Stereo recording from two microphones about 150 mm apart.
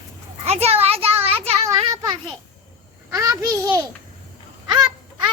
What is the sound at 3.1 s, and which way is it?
A child's voice, 20° right (ahead or behind).